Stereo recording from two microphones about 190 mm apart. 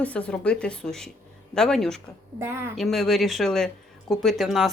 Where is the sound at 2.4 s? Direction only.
15° right (ahead or behind).